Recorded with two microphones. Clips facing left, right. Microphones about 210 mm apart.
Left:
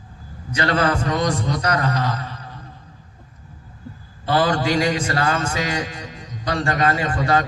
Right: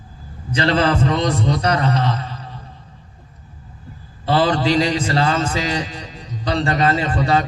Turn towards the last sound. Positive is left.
turn(degrees=-25)  # may be behind; listen again after turning